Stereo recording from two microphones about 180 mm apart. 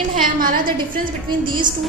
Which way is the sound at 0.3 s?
50° right (ahead or behind).